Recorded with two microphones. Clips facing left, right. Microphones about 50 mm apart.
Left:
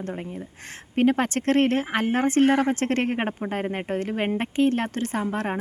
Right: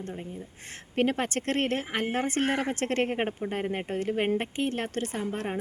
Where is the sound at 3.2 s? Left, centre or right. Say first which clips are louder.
Left 3 dB; left.